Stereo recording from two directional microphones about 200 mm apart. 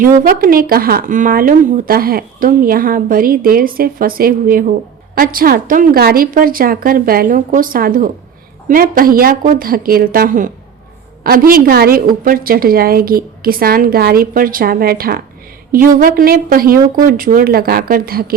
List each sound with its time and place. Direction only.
0.0 s speech: 45° right (ahead or behind)